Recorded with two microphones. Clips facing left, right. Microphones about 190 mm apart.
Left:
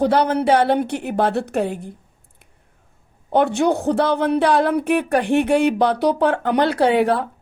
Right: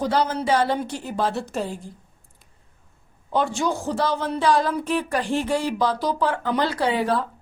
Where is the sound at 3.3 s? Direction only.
60° left (ahead or behind).